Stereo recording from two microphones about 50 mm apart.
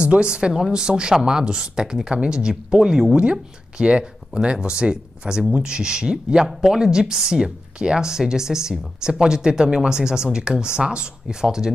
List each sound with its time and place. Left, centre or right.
0.0 s speech: right